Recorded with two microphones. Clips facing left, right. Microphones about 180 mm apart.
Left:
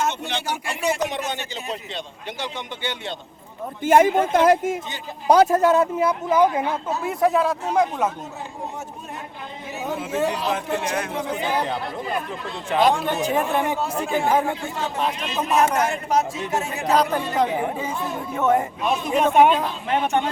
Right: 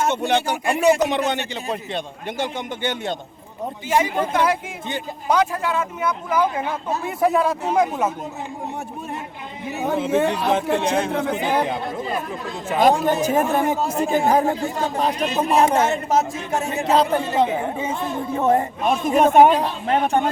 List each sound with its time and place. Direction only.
0.1 s a man's voice: 55° right (ahead or behind)
2.4 s speech: 50° right (ahead or behind)
3.8 s speech: 50° left (ahead or behind); by 6.7 s 20° left (ahead or behind)
7.0 s speech: centre (ahead or behind)
9.7 s a man's voice: 55° right (ahead or behind)
10.5 s speech: 25° right (ahead or behind)
11.1 s a man's voice: 55° right (ahead or behind)
12.8 s speech: 40° right (ahead or behind)
15.4 s speech: 30° right (ahead or behind)
18.8 s speech: 50° right (ahead or behind)